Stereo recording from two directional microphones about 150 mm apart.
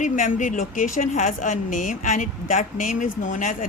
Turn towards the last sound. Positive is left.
turn(degrees=55)  # may be behind; listen again after turning